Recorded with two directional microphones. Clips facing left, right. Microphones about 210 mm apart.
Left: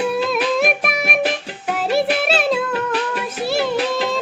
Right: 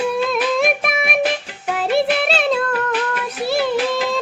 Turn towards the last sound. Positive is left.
turn(degrees=0)  # may be behind; listen again after turning